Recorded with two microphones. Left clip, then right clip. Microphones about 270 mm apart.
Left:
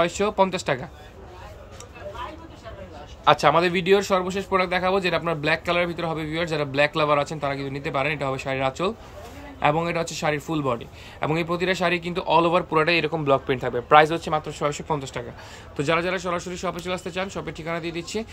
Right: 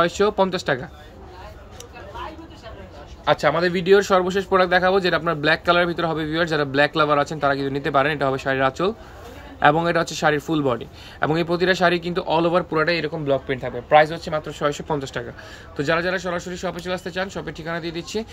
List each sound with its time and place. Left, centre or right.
0.0 s speech: centre
3.3 s speech: centre